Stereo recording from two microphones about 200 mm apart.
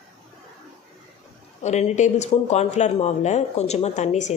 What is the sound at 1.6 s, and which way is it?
Speech, 35° left (ahead or behind).